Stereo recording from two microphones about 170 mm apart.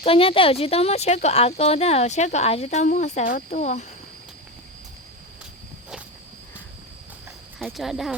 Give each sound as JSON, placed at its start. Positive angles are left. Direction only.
{"t": 0.0, "sound": "speech", "side_deg": 35}
{"t": 7.6, "sound": "speech", "side_deg": 0}